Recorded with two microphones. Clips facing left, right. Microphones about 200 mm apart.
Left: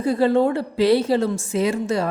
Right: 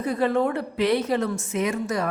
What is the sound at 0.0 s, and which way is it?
A woman's voice, 30° left (ahead or behind).